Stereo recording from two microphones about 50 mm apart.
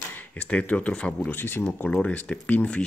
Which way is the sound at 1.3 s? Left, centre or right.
Left.